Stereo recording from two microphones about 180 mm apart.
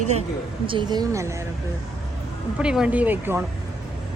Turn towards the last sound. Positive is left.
turn(degrees=-10)  # may be behind; listen again after turning